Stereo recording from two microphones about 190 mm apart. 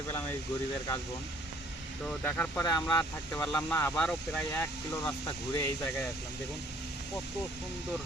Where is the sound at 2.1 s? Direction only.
5° left (ahead or behind).